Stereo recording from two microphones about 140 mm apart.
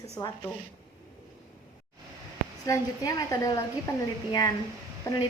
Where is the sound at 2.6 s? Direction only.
25° left (ahead or behind).